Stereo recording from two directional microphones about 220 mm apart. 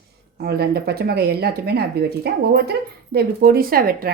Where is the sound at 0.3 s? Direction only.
45° right (ahead or behind).